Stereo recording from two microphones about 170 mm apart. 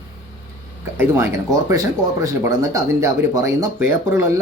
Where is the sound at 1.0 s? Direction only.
15° right (ahead or behind).